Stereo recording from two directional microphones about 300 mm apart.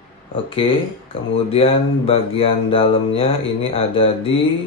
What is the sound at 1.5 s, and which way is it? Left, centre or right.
Speech, centre.